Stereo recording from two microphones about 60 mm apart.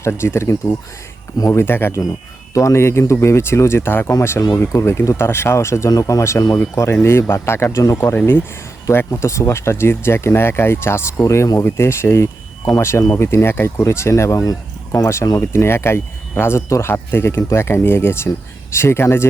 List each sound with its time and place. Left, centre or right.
0.0 s speech: left
1.5 s speech: left
2.5 s speech: left
5.9 s speech: left
7.0 s speech: left
8.0 s speech: left
15.4 s speech: left